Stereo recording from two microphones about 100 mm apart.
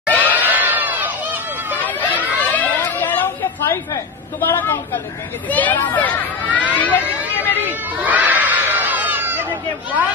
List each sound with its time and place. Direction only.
0.2 s crowd: 20° right (ahead or behind)
1.8 s run: 15° left (ahead or behind)
2.1 s crowd: 15° right (ahead or behind)
2.5 s chatter: 15° left (ahead or behind)
5.5 s speech: 15° left (ahead or behind)
7.6 s crowd: 15° right (ahead or behind)